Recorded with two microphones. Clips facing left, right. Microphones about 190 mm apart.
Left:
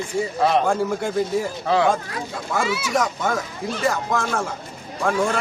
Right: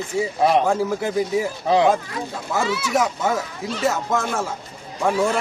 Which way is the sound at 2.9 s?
5° right (ahead or behind).